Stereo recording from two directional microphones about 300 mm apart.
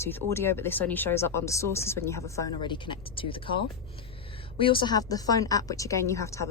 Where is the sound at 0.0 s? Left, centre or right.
Centre.